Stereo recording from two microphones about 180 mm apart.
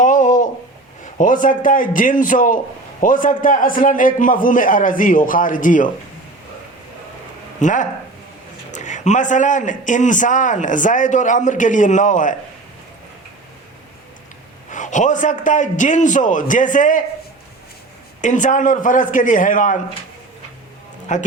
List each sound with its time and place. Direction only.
0.0 s a sound: 45° left (ahead or behind)
1.2 s a man's voice: 45° left (ahead or behind)
7.6 s a man's voice: 45° left (ahead or behind)
14.7 s a man's voice: 45° left (ahead or behind)
18.2 s a man's voice: 45° left (ahead or behind)
21.1 s a man's voice: 45° left (ahead or behind)